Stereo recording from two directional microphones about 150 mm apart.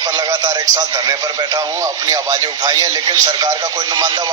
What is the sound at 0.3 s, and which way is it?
Speech, 25° right (ahead or behind).